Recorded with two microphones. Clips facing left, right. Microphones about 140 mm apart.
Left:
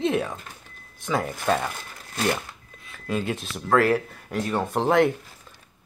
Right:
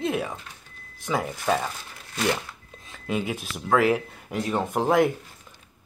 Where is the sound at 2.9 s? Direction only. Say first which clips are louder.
Left 1 dB; 15° right (ahead or behind).